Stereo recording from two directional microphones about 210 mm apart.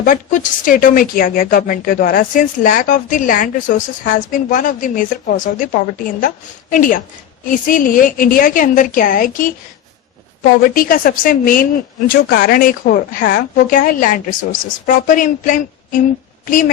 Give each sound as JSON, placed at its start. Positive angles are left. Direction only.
{"t": 0.0, "sound": "a woman's voice", "side_deg": 40}
{"t": 10.6, "sound": "a woman's voice", "side_deg": 40}